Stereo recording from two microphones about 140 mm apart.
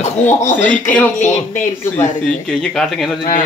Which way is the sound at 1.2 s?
60° left (ahead or behind).